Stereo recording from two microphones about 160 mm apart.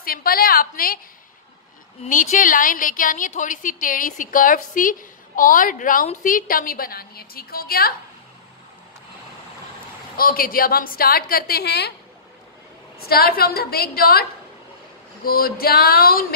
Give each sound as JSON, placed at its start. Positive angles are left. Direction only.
{"t": 0.0, "sound": "a woman's voice", "side_deg": 70}
{"t": 2.0, "sound": "a woman's voice", "side_deg": 55}
{"t": 10.1, "sound": "a woman's voice", "side_deg": 65}
{"t": 13.0, "sound": "a woman's voice", "side_deg": 70}
{"t": 15.2, "sound": "a woman's voice", "side_deg": 70}